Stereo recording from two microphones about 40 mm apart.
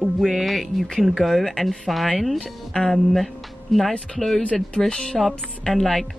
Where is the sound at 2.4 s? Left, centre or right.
Centre.